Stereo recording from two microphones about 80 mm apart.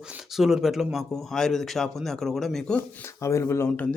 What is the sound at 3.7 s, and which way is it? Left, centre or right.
Speech, left.